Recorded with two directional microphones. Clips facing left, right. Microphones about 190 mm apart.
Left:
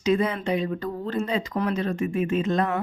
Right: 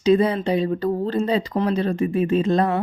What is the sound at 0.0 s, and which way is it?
Speech, 35° right (ahead or behind).